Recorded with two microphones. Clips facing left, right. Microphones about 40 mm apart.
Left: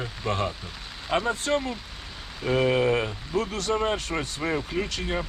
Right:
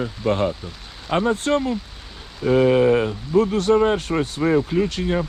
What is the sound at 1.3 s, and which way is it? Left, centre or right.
Speech, right.